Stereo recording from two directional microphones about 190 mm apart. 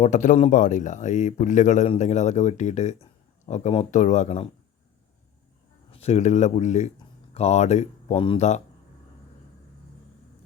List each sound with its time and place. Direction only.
0.0 s a man's voice: 40° left (ahead or behind)
5.9 s a man's voice: 35° left (ahead or behind)